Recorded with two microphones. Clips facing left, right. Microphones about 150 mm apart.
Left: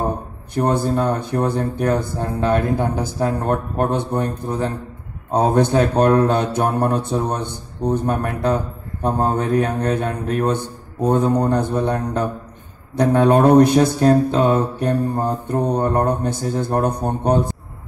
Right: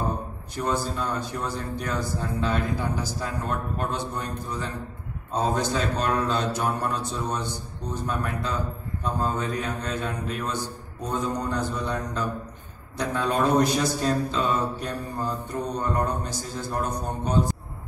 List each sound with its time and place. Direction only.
0.6 s speech: 60° left (ahead or behind)